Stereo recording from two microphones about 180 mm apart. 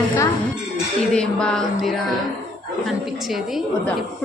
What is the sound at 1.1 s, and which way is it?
Speech, 5° left (ahead or behind).